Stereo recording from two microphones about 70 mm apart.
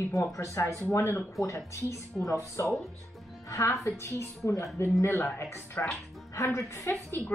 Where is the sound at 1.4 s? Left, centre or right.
Centre.